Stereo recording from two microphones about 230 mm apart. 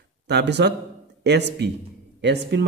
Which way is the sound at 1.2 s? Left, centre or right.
Right.